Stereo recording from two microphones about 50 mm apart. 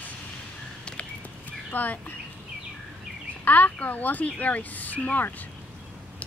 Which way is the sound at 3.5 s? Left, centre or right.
Left.